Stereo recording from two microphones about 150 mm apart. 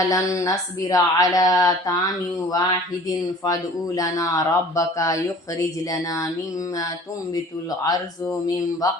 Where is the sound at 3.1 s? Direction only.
25° left (ahead or behind).